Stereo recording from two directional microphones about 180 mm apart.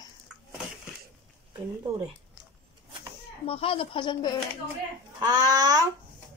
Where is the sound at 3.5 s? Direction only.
30° left (ahead or behind).